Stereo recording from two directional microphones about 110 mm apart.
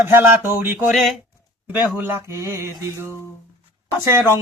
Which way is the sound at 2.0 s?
20° right (ahead or behind).